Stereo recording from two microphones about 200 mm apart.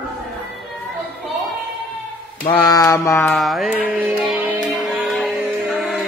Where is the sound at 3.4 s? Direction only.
Centre (ahead or behind).